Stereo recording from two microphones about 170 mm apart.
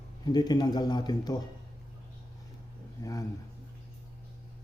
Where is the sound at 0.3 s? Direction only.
25° left (ahead or behind).